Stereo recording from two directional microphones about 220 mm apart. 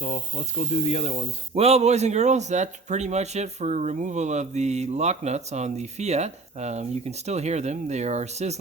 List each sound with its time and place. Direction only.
0.0 s speech: 35° left (ahead or behind)
1.5 s speech: 30° right (ahead or behind)